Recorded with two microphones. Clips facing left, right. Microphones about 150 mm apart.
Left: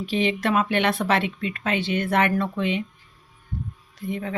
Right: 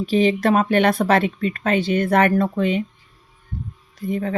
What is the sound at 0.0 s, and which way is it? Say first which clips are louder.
Speech: right 6 dB; 40° right (ahead or behind).